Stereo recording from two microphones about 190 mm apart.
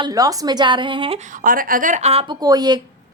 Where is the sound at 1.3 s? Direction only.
45° right (ahead or behind).